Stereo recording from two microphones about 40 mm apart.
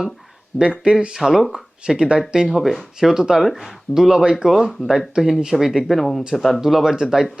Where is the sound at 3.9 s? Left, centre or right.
Centre.